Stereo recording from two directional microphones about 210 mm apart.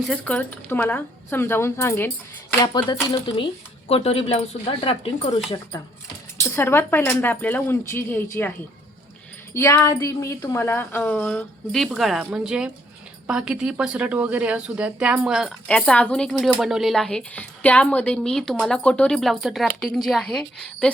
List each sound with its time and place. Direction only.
0.0 s a woman's voice: 5° left (ahead or behind); by 5.3 s 25° left (ahead or behind)
6.4 s a woman's voice: 10° left (ahead or behind)